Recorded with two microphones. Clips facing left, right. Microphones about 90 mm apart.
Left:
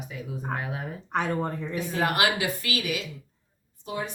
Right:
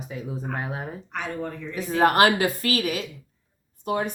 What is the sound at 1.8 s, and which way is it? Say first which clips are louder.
Speech: right 7 dB; 40° right (ahead or behind).